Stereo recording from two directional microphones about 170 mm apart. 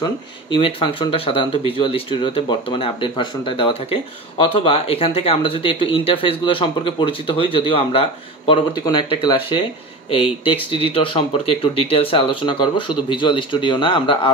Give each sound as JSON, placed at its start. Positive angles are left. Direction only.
{"t": 0.0, "sound": "speech", "side_deg": 30}